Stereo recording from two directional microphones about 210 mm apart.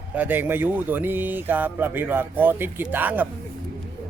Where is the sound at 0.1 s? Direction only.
10° right (ahead or behind).